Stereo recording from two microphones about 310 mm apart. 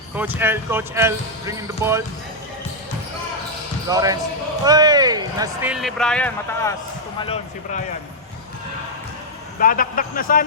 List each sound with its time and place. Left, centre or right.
0.2 s speech: centre
3.8 s speech: centre
5.7 s speech: centre
7.2 s a man's voice: left
9.6 s a man's voice: left